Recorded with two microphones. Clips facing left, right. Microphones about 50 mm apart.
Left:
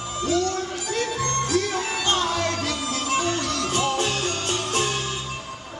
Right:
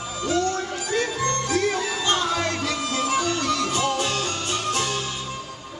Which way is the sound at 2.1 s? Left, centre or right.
Right.